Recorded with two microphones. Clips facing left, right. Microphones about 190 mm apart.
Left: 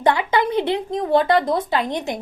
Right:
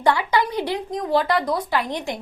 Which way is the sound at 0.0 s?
20° left (ahead or behind).